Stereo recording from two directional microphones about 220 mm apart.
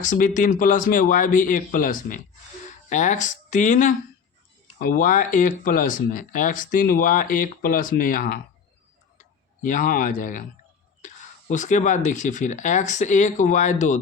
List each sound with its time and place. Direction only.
0.0 s speech: 35° left (ahead or behind)